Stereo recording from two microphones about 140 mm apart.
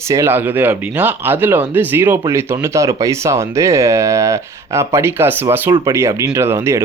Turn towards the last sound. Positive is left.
turn(degrees=-20)  # may be behind; listen again after turning